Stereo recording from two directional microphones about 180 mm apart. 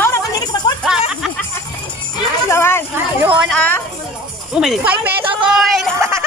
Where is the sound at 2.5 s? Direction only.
15° left (ahead or behind).